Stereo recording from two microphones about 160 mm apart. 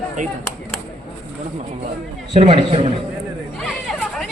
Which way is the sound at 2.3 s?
40° right (ahead or behind).